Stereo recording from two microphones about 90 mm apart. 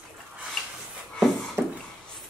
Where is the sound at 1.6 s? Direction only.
30° right (ahead or behind).